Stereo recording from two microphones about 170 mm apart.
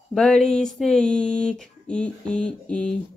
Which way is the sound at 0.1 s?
5° left (ahead or behind).